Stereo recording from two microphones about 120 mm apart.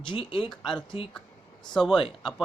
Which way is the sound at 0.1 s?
45° left (ahead or behind).